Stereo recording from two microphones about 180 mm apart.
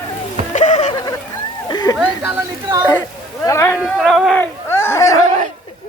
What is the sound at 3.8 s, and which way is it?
Speech, centre (ahead or behind).